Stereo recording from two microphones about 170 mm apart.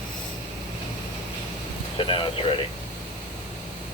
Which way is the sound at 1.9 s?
30° left (ahead or behind).